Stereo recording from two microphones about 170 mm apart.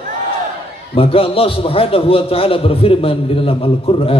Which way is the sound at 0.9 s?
35° left (ahead or behind).